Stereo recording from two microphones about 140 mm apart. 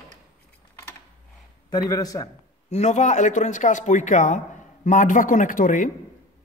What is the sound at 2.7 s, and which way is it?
A man's voice, 55° left (ahead or behind).